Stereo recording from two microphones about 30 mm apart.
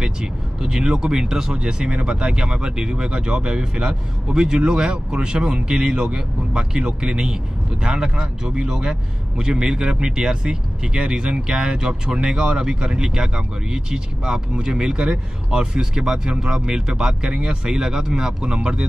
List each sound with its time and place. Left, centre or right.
0.0 s speech: right